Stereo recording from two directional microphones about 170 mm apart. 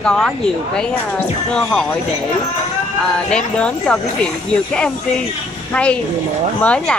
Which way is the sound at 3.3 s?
5° left (ahead or behind).